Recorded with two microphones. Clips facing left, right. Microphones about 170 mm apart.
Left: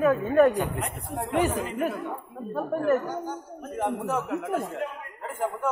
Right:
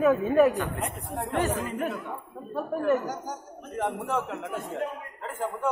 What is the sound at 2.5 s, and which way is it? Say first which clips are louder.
Speech: left 1 dB; centre (ahead or behind).